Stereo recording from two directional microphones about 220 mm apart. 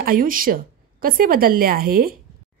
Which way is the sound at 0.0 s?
40° right (ahead or behind).